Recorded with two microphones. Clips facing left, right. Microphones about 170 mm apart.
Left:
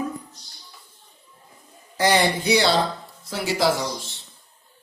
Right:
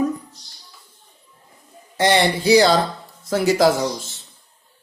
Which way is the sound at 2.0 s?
25° right (ahead or behind).